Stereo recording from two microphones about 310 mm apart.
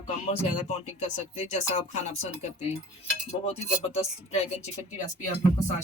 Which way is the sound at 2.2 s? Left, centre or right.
Centre.